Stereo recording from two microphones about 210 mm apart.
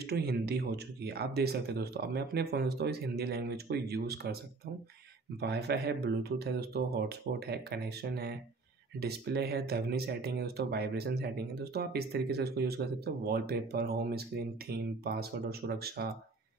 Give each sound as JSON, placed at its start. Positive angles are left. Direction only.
{"t": 0.0, "sound": "speech", "side_deg": -50}
{"t": 5.4, "sound": "speech", "side_deg": -50}